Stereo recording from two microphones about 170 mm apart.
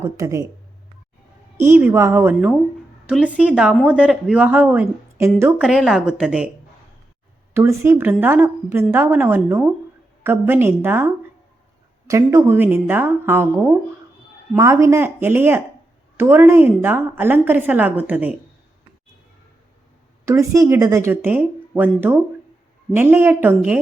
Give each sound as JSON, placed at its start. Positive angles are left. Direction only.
{"t": 0.0, "sound": "a woman's voice", "side_deg": -20}
{"t": 1.5, "sound": "a woman's voice", "side_deg": -15}
{"t": 5.6, "sound": "a woman's voice", "side_deg": -5}
{"t": 7.5, "sound": "a woman's voice", "side_deg": -15}
{"t": 20.2, "sound": "a woman's voice", "side_deg": -20}